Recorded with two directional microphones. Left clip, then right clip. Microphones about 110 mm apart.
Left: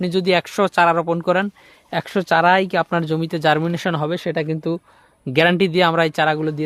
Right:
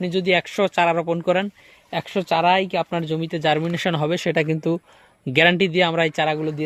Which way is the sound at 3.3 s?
35° left (ahead or behind).